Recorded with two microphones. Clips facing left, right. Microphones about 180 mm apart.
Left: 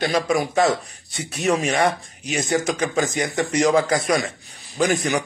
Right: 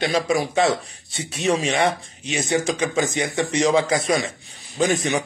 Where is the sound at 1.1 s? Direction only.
25° right (ahead or behind).